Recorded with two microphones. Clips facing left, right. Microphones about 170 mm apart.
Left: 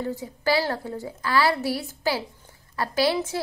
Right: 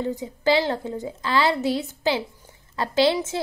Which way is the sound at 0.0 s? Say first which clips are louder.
Right 3 dB; 20° right (ahead or behind).